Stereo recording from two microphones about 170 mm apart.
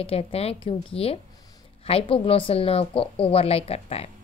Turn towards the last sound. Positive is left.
turn(degrees=35)  # may be behind; listen again after turning